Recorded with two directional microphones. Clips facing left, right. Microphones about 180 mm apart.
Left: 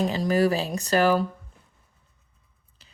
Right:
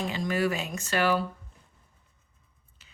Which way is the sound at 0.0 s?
40° left (ahead or behind).